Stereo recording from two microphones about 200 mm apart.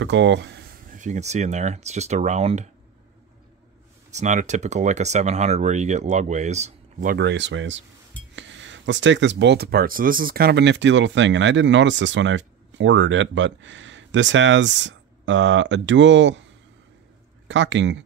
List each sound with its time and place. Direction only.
0.0 s speech: 65° right (ahead or behind)
0.9 s speech: 35° right (ahead or behind)
4.1 s speech: 35° right (ahead or behind)
7.2 s speech: 60° right (ahead or behind)
17.5 s speech: 65° right (ahead or behind)